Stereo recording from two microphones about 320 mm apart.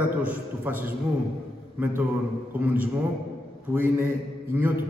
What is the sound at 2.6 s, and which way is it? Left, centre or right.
A man's voice, centre.